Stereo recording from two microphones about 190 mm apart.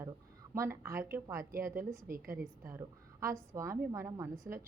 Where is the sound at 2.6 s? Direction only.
15° right (ahead or behind).